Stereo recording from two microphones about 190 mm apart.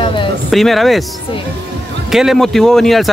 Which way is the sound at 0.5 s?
Centre (ahead or behind).